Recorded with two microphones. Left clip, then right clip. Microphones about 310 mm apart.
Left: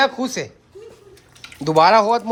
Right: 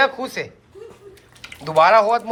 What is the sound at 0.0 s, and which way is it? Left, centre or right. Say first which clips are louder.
Speech: even; centre.